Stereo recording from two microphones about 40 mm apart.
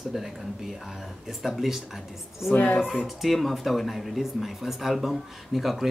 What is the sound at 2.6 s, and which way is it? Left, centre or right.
Speech, left.